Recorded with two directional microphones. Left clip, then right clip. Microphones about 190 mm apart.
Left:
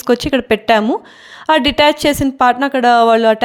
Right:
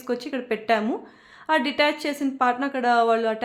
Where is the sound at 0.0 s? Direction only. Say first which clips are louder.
Left 14 dB; 45° left (ahead or behind).